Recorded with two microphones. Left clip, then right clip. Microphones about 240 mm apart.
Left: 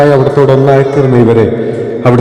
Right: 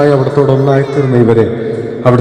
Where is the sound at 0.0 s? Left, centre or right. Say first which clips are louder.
Left 3 dB; left.